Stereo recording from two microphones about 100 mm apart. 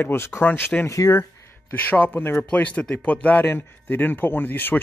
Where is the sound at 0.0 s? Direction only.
25° left (ahead or behind).